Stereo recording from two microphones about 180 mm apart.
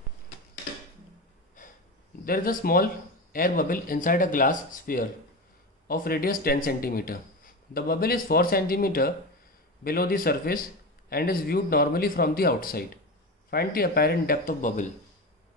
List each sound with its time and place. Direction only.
1.6 s wheeze: 45° left (ahead or behind)
2.2 s speech: 55° left (ahead or behind)